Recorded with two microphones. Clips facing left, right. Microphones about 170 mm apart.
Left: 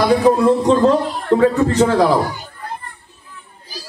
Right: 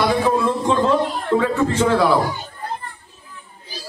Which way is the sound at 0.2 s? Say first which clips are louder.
Left 6 dB; 35° left (ahead or behind).